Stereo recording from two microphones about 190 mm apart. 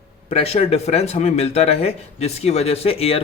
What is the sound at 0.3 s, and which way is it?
Speech, 30° left (ahead or behind).